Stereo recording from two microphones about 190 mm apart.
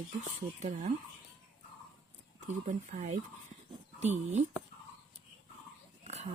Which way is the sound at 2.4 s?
40° right (ahead or behind).